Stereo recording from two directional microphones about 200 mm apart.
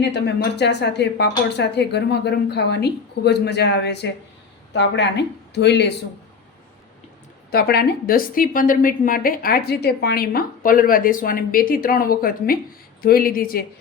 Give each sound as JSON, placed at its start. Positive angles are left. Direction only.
{"t": 0.0, "sound": "speech", "side_deg": 60}
{"t": 7.5, "sound": "a woman's voice", "side_deg": 50}